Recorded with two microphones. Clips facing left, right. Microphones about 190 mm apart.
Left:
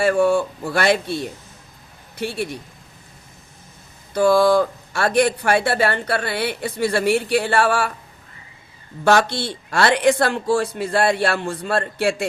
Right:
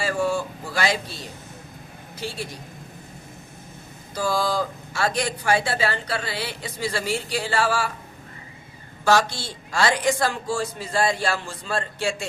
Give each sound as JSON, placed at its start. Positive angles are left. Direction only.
{"t": 0.0, "sound": "speech", "side_deg": 60}
{"t": 4.1, "sound": "speech", "side_deg": 60}
{"t": 9.0, "sound": "speech", "side_deg": 60}